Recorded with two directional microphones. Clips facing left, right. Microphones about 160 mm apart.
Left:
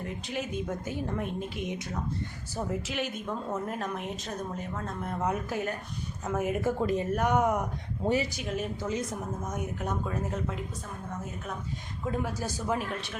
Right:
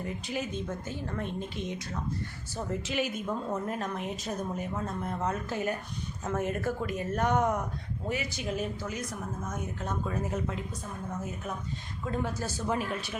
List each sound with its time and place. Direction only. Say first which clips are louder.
0.0 s a woman's voice: even; centre (ahead or behind)
0.5 s a woman's voice: left 3 dB; 15° left (ahead or behind)
1.6 s a woman's voice: left 2 dB; 20° left (ahead or behind)
2.6 s a woman's voice: even; 5° left (ahead or behind)
5.2 s a woman's voice: left 2 dB; 10° left (ahead or behind)
6.7 s a woman's voice: left 5 dB; 30° left (ahead or behind)
7.1 s a woman's voice: right 2 dB; 10° left (ahead or behind)
8.0 s speech: left 7 dB; 30° left (ahead or behind)
8.4 s a woman's voice: even; centre (ahead or behind)
8.8 s a woman's voice: left 4 dB; 25° left (ahead or behind)
10.1 s a woman's voice: even; centre (ahead or behind)
12.1 s a woman's voice: right 1 dB; 10° left (ahead or behind)
12.7 s a woman's voice: right 1 dB; centre (ahead or behind)